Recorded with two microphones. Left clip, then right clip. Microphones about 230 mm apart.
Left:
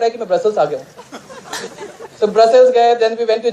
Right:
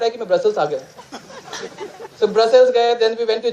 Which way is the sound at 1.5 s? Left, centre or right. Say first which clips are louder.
Left 4 dB; centre.